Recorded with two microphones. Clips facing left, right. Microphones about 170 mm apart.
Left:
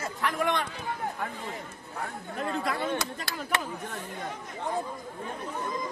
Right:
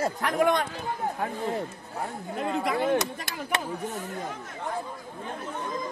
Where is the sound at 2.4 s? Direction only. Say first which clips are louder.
Right 3 dB; 20° right (ahead or behind).